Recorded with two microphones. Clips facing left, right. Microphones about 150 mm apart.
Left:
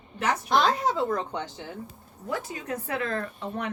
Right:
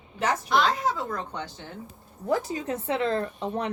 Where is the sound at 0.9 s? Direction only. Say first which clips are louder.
Left 4 dB; 20° left (ahead or behind).